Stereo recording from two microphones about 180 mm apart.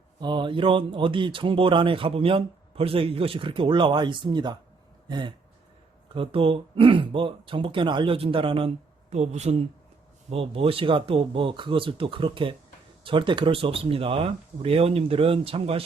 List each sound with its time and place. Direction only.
0.2 s speech: 25° right (ahead or behind)
5.0 s a sound: 25° right (ahead or behind)
6.1 s speech: 30° right (ahead or behind)